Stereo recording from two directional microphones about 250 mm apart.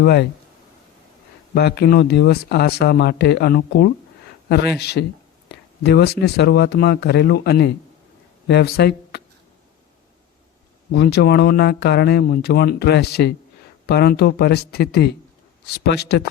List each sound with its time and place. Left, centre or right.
0.0 s speech: left
1.5 s speech: left
10.9 s speech: left